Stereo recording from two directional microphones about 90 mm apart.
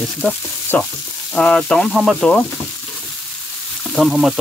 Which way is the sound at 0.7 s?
15° left (ahead or behind).